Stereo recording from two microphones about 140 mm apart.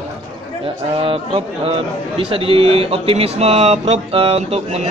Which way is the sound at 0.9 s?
40° right (ahead or behind).